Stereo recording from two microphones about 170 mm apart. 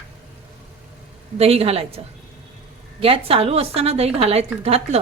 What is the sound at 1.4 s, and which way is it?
Speech, 35° right (ahead or behind).